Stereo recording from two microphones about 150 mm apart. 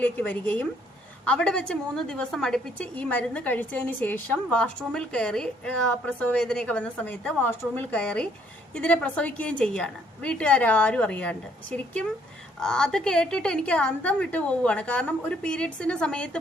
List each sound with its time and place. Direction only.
0.0 s a woman's voice: 10° left (ahead or behind)